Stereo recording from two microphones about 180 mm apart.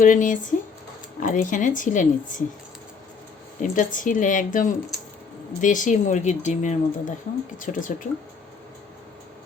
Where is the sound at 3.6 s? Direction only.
45° left (ahead or behind).